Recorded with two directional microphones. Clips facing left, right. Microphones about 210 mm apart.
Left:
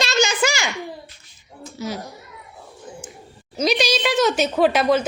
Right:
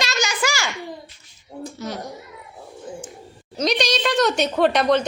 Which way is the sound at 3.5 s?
5° left (ahead or behind).